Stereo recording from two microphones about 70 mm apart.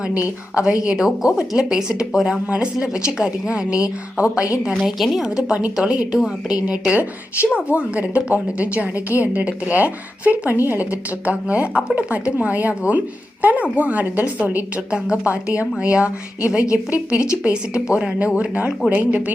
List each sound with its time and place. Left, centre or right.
0.8 s speech: centre
4.9 s a woman's voice: centre
5.5 s a woman's voice: centre